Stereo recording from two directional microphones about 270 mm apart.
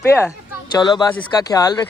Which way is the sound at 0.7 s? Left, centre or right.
Centre.